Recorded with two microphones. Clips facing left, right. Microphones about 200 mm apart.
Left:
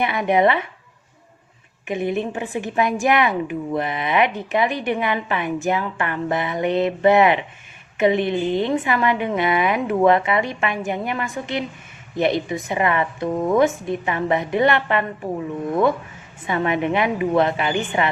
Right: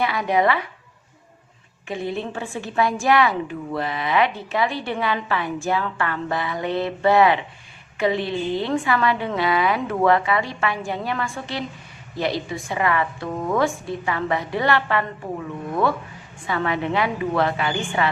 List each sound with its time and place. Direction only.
0.0 s a woman's voice: 20° left (ahead or behind)
1.9 s a woman's voice: 20° left (ahead or behind)
16.5 s a woman's voice: 20° left (ahead or behind)